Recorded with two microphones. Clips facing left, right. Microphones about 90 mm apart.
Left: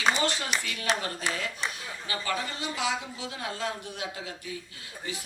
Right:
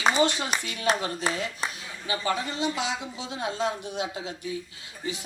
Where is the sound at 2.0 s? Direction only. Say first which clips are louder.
Right 4 dB; 20° right (ahead or behind).